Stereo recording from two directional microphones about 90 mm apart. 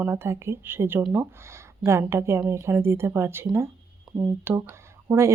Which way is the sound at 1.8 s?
30° right (ahead or behind).